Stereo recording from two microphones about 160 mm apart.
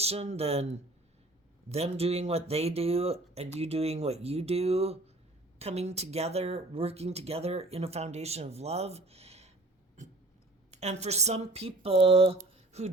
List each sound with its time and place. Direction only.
0.0 s speech: 40° right (ahead or behind)
10.0 s a sound: 50° right (ahead or behind)
10.7 s speech: 45° right (ahead or behind)